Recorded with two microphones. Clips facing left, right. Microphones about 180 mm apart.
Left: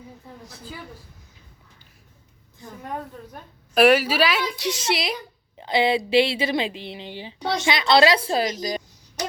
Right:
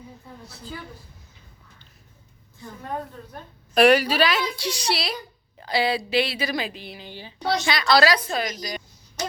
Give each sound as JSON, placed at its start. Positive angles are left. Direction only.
{"t": 3.8, "sound": "a woman's voice", "side_deg": 5}
{"t": 4.5, "sound": "speech", "side_deg": 20}